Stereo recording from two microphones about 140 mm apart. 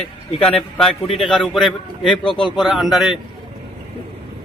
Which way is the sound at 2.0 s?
40° left (ahead or behind).